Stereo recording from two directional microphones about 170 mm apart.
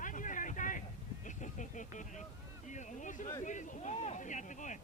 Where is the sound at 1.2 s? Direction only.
45° left (ahead or behind).